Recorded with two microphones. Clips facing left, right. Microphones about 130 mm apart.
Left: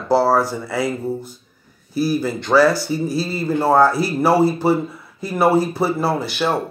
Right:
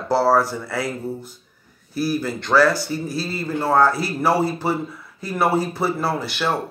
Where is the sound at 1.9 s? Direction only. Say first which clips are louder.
Left 3 dB; centre (ahead or behind).